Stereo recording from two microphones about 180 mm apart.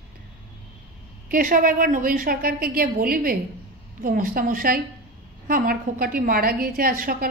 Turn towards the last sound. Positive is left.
turn(degrees=-55)  # may be behind; listen again after turning